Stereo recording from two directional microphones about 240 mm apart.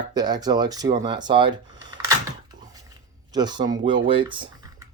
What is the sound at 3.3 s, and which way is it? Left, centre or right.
Speech, centre.